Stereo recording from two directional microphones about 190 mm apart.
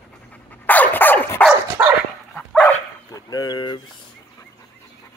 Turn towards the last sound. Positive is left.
turn(degrees=20)  # may be behind; listen again after turning